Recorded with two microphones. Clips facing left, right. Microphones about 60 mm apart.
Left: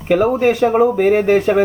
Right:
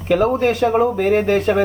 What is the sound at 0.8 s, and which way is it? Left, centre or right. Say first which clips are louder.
Speech: left 3 dB; centre.